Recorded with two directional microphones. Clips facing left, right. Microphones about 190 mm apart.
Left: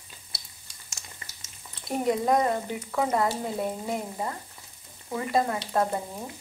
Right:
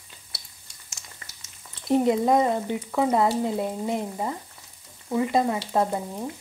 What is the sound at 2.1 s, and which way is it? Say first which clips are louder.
Frying: left 1 dB; 20° right (ahead or behind).